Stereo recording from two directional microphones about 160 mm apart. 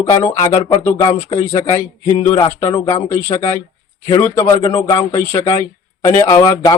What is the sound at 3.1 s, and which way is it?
A man's voice, 15° left (ahead or behind).